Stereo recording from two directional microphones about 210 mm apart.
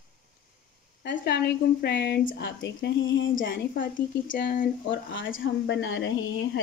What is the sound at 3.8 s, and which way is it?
Speech, 40° left (ahead or behind).